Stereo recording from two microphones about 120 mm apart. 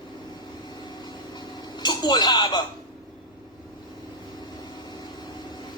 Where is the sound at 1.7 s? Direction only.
35° left (ahead or behind).